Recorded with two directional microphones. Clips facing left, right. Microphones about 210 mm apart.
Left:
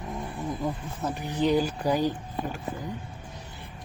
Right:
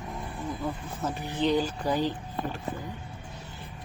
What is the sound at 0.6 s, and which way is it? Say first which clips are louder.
Snake: even; 15° left (ahead or behind).